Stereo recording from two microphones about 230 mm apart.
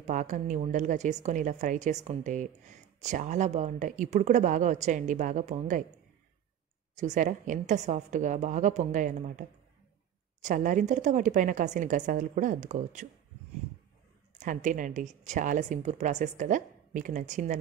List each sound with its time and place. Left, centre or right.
0.0 s a woman's voice: right
7.0 s a woman's voice: right
14.3 s a woman's voice: right